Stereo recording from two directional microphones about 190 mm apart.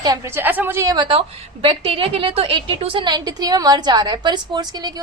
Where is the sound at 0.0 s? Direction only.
15° right (ahead or behind).